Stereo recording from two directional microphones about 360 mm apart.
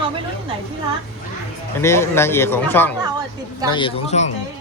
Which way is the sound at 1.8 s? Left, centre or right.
Centre.